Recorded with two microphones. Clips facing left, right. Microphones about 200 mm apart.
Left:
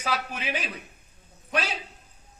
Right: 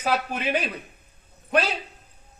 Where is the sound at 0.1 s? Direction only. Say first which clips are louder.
Right 6 dB; 60° right (ahead or behind).